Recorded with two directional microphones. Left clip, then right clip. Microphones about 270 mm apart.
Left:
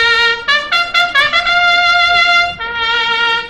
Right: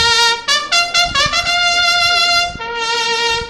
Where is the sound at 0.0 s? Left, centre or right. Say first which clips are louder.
Left 1 dB; right.